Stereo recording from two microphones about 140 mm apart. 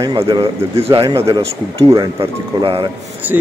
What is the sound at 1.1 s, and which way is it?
Speech, 25° right (ahead or behind).